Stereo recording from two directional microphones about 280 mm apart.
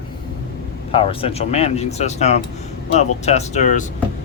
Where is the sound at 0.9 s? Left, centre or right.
Centre.